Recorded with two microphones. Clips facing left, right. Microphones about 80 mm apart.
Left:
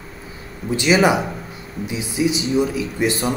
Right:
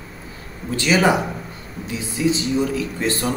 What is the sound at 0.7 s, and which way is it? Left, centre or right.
Speech, centre.